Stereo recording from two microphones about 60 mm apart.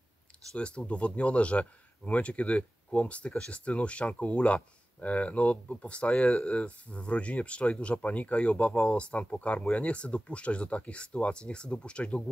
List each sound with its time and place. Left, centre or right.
0.6 s speech: centre